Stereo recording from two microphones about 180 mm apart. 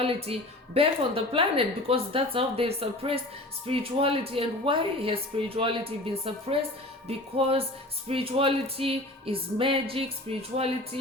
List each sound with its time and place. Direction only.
0.0 s a woman's voice: 30° right (ahead or behind)